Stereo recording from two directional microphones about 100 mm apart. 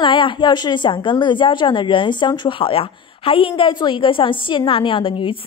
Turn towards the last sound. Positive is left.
turn(degrees=60)  # may be behind; listen again after turning